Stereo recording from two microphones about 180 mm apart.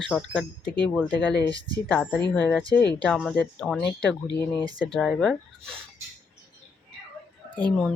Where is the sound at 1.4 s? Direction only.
20° right (ahead or behind).